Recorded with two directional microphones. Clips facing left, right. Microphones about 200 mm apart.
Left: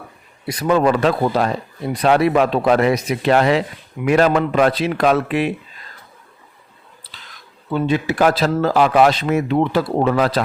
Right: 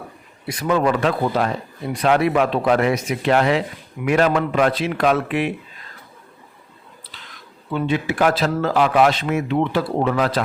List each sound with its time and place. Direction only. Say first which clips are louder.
0.4 s a man's voice: left 3 dB; 35° left (ahead or behind)
7.7 s a man's voice: left 3 dB; 40° left (ahead or behind)